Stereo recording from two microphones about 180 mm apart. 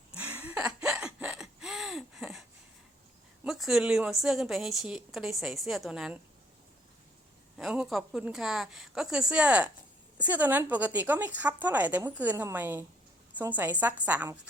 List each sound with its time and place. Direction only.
0.2 s gasp: 10° right (ahead or behind)
3.4 s a woman's voice: centre (ahead or behind)
7.5 s a woman's voice: 5° right (ahead or behind)